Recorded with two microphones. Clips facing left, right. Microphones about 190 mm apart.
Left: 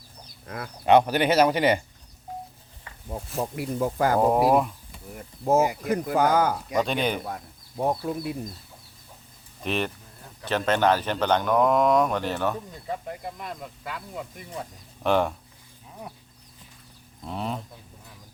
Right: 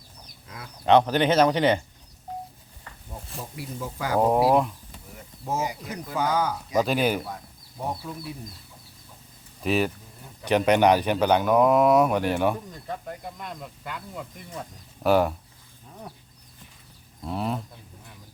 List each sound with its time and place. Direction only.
0.4 s speech: 55° left (ahead or behind)
0.9 s speech: 10° left (ahead or behind)
3.1 s speech: 60° left (ahead or behind)
4.3 s speech: 5° right (ahead or behind)
5.5 s speech: 55° left (ahead or behind)
6.7 s speech: 5° right (ahead or behind)
8.0 s speech: 60° left (ahead or behind)
9.6 s speech: 5° right (ahead or behind)
10.4 s speech: 15° right (ahead or behind)
12.7 s speech: 5° left (ahead or behind)
15.0 s speech: 5° right (ahead or behind)
17.2 s speech: 5° right (ahead or behind)